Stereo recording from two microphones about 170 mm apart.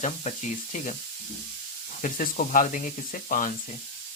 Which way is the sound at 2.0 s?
45° left (ahead or behind).